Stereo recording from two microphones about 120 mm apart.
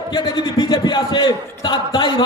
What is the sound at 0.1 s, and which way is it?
A man's voice, 35° left (ahead or behind).